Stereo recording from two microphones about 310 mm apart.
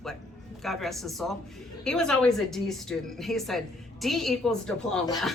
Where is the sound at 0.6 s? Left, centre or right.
Centre.